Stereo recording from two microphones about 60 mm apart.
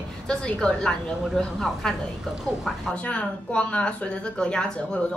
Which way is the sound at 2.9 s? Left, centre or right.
Centre.